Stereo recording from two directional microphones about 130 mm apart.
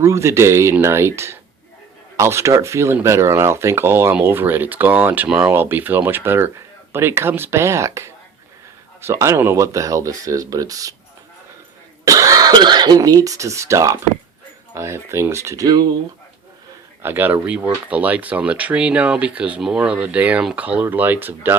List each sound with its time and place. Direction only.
0.0 s speech: 20° right (ahead or behind)
12.0 s speech: 25° right (ahead or behind)
17.0 s speech: 15° right (ahead or behind)